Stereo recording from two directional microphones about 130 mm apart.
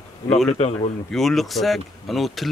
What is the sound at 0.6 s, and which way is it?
Speech, 55° left (ahead or behind).